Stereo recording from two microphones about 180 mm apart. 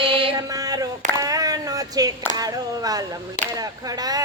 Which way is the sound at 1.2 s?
20° right (ahead or behind).